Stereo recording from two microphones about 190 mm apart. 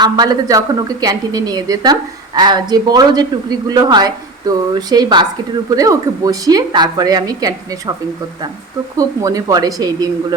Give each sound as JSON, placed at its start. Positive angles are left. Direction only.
{"t": 0.0, "sound": "a woman's voice", "side_deg": -20}
{"t": 9.0, "sound": "a woman's voice", "side_deg": -20}